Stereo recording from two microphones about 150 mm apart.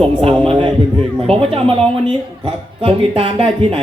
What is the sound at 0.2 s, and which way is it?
A man's voice, 40° right (ahead or behind).